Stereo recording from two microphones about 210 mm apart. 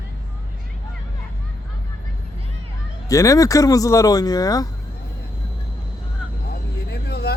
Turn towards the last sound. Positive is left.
turn(degrees=50)  # may be behind; listen again after turning